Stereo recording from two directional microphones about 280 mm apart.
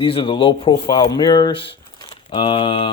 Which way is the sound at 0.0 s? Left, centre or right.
Centre.